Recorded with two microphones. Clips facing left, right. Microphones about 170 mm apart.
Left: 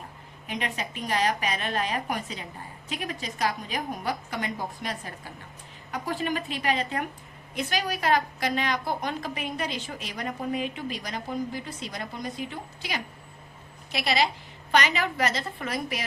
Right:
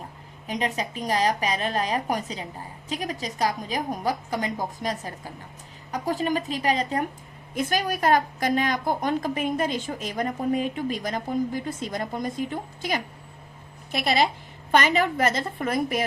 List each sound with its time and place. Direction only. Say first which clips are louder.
0.4 s a woman's voice: right 5 dB; 40° right (ahead or behind)